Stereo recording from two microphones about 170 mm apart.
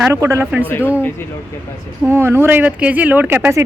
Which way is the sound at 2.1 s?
15° right (ahead or behind).